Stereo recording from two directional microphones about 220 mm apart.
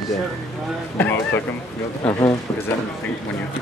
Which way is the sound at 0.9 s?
10° left (ahead or behind).